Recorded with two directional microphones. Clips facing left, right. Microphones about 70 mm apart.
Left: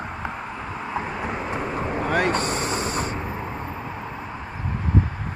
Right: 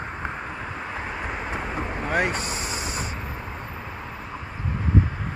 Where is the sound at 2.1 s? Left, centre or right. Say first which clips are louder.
Left 3 dB; centre.